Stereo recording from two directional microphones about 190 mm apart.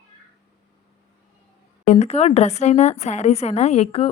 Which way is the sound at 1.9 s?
35° left (ahead or behind).